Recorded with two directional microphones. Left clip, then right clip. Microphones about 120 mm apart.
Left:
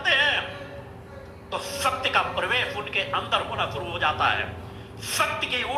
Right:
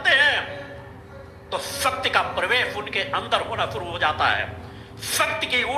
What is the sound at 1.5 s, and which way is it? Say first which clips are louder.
A woman's voice: right 2 dB; 20° right (ahead or behind).